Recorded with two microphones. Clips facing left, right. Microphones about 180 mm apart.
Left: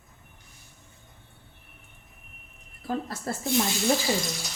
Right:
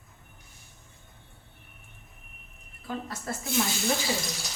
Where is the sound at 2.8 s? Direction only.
35° left (ahead or behind).